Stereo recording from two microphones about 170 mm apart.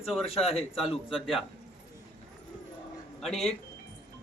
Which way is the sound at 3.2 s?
Centre (ahead or behind).